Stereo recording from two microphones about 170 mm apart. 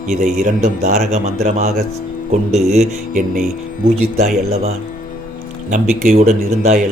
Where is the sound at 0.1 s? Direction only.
45° right (ahead or behind).